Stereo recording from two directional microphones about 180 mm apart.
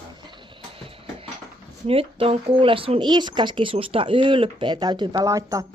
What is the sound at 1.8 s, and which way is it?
Speech, 30° right (ahead or behind).